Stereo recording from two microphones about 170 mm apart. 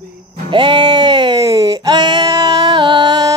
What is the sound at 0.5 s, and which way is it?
Speech, 30° right (ahead or behind).